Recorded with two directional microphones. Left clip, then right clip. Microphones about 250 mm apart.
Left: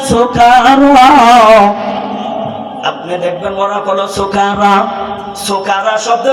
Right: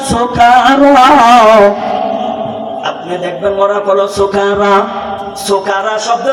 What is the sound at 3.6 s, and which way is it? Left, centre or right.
A man's voice, left.